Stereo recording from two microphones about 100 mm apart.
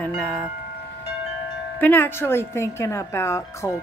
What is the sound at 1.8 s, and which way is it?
Speech, 20° left (ahead or behind).